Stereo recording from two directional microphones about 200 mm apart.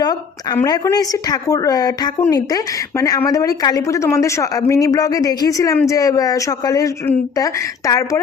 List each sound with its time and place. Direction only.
0.0 s speech: 20° left (ahead or behind)